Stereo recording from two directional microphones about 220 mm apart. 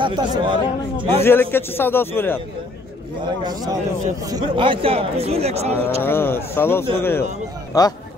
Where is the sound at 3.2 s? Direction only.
20° right (ahead or behind).